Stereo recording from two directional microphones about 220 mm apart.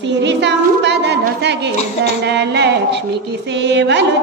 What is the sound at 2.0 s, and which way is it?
Music, 50° right (ahead or behind).